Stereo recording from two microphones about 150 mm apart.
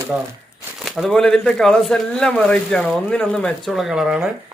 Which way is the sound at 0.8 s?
Centre (ahead or behind).